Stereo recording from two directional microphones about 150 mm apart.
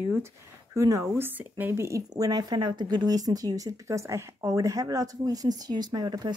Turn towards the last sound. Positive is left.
turn(degrees=-25)  # may be behind; listen again after turning